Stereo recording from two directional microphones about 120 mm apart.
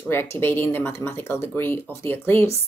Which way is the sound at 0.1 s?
20° left (ahead or behind).